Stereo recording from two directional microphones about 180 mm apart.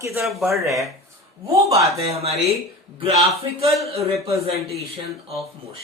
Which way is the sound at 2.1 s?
35° right (ahead or behind).